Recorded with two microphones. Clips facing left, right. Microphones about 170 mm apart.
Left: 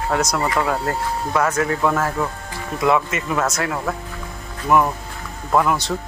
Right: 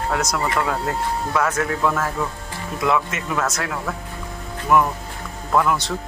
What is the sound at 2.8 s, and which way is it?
Speech, centre (ahead or behind).